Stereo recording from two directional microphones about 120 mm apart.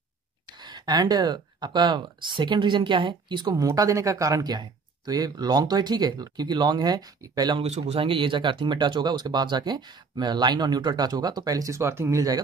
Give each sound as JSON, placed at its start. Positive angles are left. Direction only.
{"t": 0.7, "sound": "speech", "side_deg": -35}
{"t": 7.6, "sound": "speech", "side_deg": -65}